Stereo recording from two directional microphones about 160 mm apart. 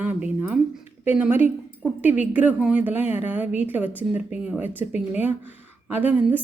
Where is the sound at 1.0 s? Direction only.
10° right (ahead or behind).